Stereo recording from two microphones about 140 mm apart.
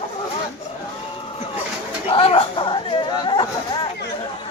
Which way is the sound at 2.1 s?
40° left (ahead or behind).